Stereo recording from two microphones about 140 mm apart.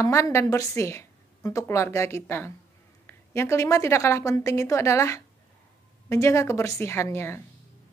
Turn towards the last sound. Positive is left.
turn(degrees=20)  # may be behind; listen again after turning